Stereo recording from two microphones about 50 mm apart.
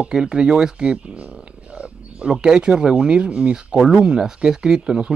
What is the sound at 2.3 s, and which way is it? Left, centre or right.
Speech, centre.